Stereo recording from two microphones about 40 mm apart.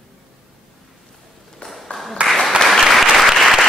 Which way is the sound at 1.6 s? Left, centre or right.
Left.